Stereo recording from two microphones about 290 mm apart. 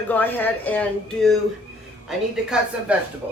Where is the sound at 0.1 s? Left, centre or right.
Centre.